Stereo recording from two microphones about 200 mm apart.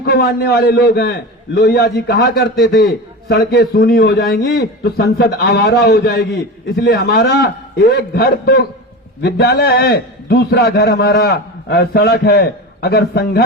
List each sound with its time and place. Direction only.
0.0 s a man's voice: 55° left (ahead or behind)